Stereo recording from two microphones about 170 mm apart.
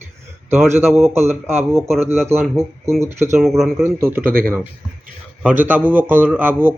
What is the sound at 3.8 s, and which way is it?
Speech, 15° right (ahead or behind).